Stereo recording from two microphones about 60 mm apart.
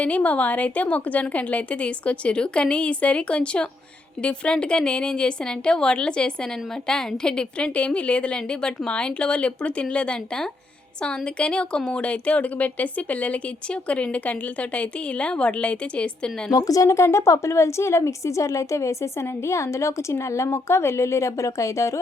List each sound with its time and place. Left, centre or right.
0.0 s a woman's voice: left
16.5 s a woman's voice: left